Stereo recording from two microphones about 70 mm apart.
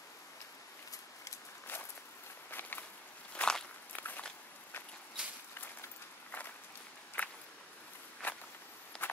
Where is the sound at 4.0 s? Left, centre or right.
Left.